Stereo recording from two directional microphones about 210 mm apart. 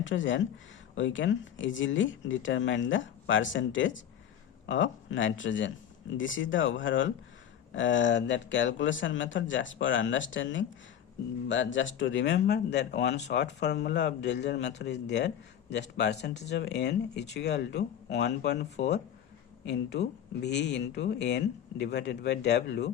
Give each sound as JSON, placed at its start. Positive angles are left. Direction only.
{"t": 0.0, "sound": "speech", "side_deg": 65}